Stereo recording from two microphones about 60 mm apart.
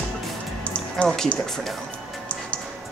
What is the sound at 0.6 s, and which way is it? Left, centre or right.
Music, left.